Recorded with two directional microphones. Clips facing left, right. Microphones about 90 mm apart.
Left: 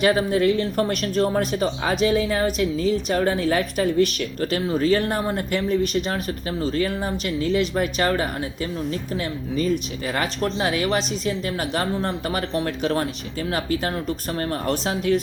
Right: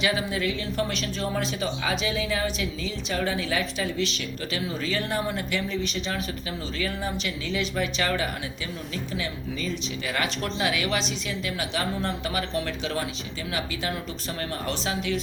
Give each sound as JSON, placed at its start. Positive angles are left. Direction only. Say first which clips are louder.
{"t": 0.0, "sound": "speech", "louder": "left 8 dB", "side_deg": 45}